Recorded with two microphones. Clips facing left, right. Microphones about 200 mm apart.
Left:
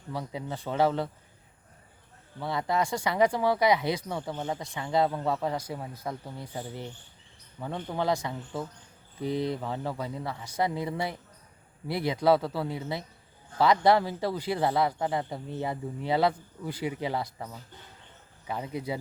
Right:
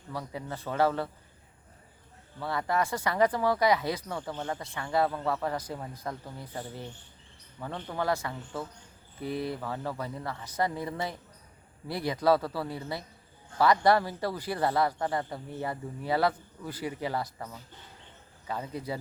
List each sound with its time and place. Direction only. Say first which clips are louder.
0.1 s speech: left 2 dB; 15° left (ahead or behind)
2.4 s speech: left 1 dB; 15° left (ahead or behind)